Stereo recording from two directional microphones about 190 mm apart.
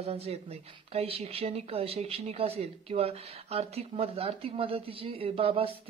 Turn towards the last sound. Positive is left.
turn(degrees=-30)  # may be behind; listen again after turning